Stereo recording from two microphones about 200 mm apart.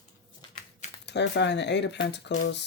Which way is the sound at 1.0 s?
60° left (ahead or behind).